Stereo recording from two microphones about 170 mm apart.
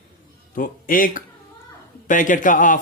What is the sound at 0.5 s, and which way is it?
A man's voice, 55° left (ahead or behind).